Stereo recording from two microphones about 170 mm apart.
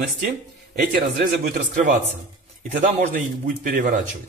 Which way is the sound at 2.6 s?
50° right (ahead or behind).